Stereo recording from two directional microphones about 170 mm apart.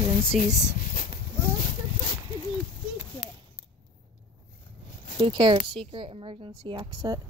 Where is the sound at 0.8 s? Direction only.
55° left (ahead or behind).